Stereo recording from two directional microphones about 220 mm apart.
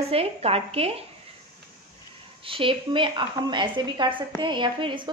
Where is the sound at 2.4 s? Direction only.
25° right (ahead or behind).